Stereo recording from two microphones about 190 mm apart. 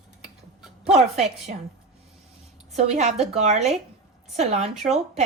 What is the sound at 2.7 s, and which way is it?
A woman's voice, 35° right (ahead or behind).